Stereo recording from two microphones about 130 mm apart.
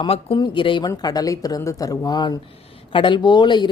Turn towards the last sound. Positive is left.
turn(degrees=35)  # may be behind; listen again after turning